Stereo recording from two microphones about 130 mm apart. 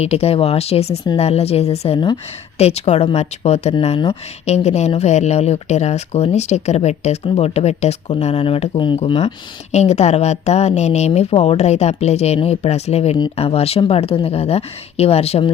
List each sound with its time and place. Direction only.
0.0 s speech: 50° left (ahead or behind)
9.0 s speech: 50° left (ahead or behind)